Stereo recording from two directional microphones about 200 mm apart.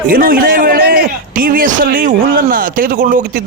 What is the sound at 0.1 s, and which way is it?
A man's voice, 45° right (ahead or behind).